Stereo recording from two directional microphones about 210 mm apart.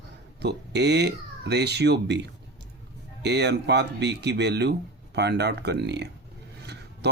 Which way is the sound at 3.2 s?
55° right (ahead or behind).